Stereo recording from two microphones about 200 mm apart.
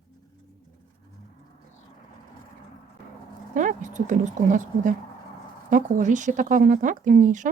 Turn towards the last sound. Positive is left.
turn(degrees=-40)  # may be behind; listen again after turning